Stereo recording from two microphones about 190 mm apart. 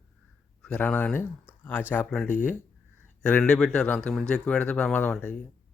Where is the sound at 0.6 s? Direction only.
5° left (ahead or behind).